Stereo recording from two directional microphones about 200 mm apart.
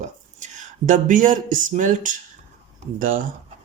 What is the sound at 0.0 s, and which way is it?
Speech, 35° right (ahead or behind).